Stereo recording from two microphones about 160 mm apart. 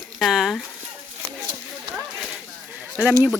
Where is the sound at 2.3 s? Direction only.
5° right (ahead or behind).